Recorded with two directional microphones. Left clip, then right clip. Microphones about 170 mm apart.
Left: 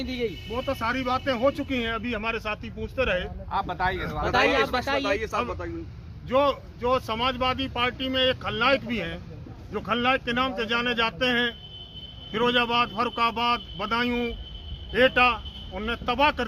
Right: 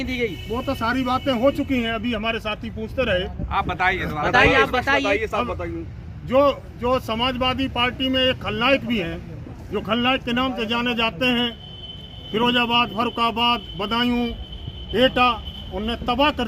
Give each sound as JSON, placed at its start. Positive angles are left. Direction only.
{"t": 0.0, "sound": "speech", "side_deg": 60}
{"t": 0.5, "sound": "speech", "side_deg": 0}
{"t": 3.5, "sound": "speech", "side_deg": 45}
{"t": 6.3, "sound": "speech", "side_deg": 5}